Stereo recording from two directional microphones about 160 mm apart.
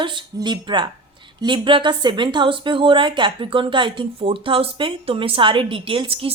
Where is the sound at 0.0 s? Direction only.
30° right (ahead or behind).